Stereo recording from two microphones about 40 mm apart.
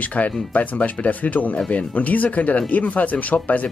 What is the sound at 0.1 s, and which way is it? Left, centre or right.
Speech, left.